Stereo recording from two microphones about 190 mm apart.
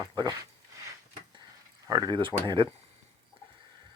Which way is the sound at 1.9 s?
20° right (ahead or behind).